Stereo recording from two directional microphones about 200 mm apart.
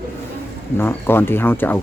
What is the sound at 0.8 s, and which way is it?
Speech, 10° left (ahead or behind).